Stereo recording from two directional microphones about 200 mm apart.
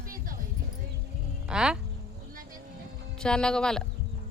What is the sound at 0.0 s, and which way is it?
Music, 45° right (ahead or behind).